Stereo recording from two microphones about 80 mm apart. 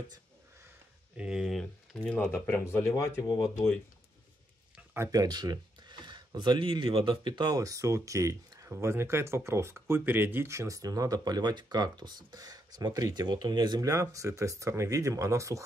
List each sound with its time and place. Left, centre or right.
1.1 s speech: centre
1.6 s speech: centre
2.1 s speech: left
5.1 s speech: right
7.5 s speech: right
13.7 s speech: right